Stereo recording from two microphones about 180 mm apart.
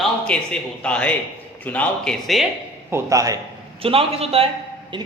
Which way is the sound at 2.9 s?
20° right (ahead or behind).